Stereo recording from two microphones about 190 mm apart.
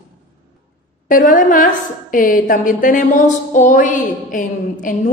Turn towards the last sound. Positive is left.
turn(degrees=45)  # may be behind; listen again after turning